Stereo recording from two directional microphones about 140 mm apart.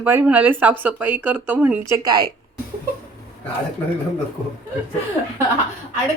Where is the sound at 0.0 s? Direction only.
15° right (ahead or behind).